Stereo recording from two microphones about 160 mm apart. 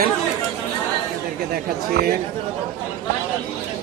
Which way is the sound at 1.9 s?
80° right.